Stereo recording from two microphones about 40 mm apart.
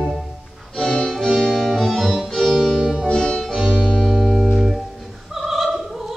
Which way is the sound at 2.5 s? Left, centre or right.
Centre.